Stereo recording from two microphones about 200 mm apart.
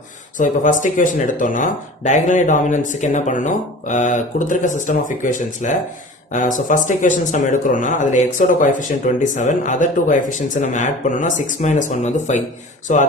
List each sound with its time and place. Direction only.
0.3 s speech: 40° left (ahead or behind)